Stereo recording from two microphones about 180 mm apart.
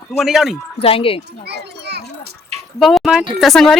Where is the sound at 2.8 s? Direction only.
Centre (ahead or behind).